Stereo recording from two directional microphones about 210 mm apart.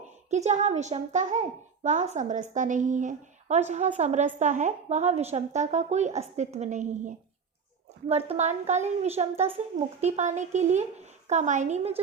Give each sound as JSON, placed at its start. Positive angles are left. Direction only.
{"t": 0.3, "sound": "speech", "side_deg": -35}